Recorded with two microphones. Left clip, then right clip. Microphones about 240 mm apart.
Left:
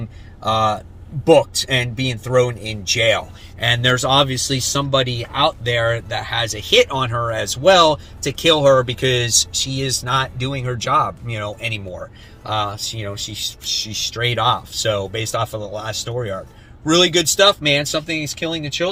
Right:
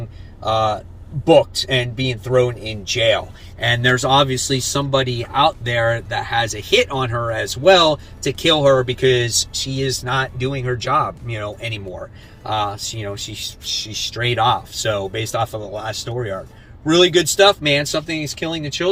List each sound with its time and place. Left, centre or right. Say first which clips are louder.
0.4 s speech: even; left
3.6 s speech: even; centre